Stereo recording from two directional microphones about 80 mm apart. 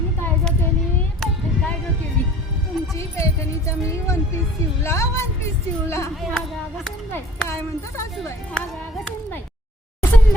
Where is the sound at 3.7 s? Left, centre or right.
Left.